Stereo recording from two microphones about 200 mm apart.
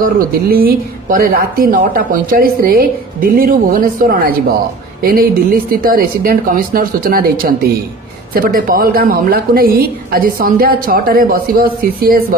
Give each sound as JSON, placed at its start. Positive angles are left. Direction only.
{"t": 0.0, "sound": "speech", "side_deg": -50}